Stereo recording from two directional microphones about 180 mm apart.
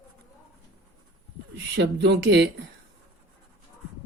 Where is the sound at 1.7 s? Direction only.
75° right (ahead or behind).